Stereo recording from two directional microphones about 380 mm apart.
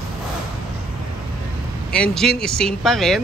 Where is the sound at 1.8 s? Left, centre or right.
Centre.